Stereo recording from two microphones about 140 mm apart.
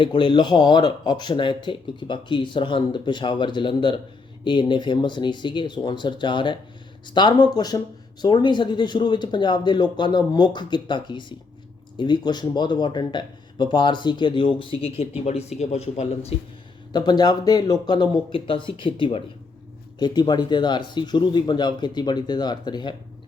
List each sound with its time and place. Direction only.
0.0 s speech: 35° left (ahead or behind)
16.9 s speech: 30° left (ahead or behind)